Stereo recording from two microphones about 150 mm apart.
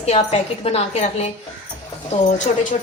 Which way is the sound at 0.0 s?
45° left (ahead or behind).